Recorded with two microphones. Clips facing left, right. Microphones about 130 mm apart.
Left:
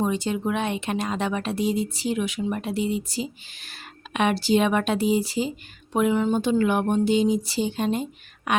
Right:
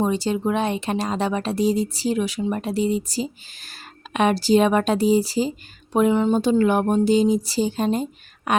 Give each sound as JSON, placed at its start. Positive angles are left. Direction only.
{"t": 0.0, "sound": "a woman's voice", "side_deg": -35}